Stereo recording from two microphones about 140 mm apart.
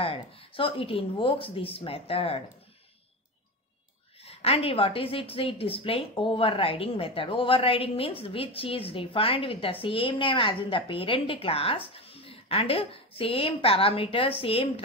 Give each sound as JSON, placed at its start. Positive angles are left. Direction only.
{"t": 0.0, "sound": "a woman's voice", "side_deg": 40}
{"t": 4.2, "sound": "a woman's voice", "side_deg": 45}